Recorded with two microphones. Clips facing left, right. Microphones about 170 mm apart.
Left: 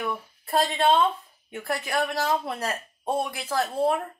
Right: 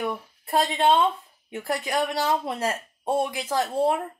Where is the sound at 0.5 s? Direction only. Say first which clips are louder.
Right 1 dB; 20° right (ahead or behind).